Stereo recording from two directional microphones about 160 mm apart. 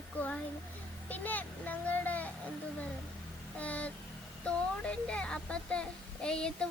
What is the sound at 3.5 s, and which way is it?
Speech, 10° left (ahead or behind).